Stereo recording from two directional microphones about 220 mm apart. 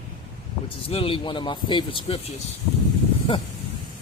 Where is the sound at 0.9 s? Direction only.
25° left (ahead or behind).